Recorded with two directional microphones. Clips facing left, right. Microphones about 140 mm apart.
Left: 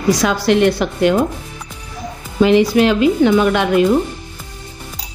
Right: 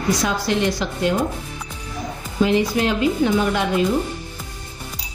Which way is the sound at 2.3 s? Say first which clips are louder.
Left 7 dB; 75° left (ahead or behind).